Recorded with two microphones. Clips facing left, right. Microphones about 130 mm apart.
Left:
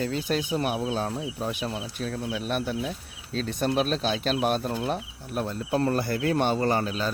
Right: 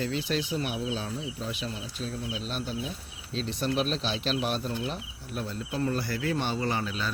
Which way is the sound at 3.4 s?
50° left (ahead or behind).